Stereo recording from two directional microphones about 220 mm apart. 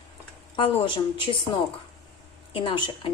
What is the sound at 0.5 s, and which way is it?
A woman's voice, 20° left (ahead or behind).